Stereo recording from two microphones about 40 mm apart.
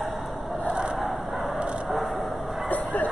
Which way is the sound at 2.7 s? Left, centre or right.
Left.